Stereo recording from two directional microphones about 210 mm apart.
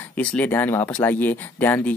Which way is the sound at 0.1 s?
5° left (ahead or behind).